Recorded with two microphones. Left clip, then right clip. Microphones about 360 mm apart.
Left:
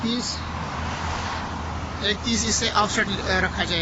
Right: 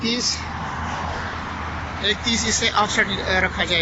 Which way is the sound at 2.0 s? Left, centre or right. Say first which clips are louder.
Right 3 dB; centre.